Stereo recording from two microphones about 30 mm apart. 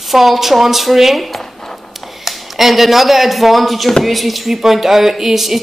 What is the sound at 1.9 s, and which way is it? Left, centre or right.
Speech, centre.